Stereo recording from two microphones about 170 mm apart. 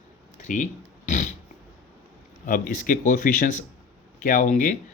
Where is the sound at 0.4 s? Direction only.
50° left (ahead or behind).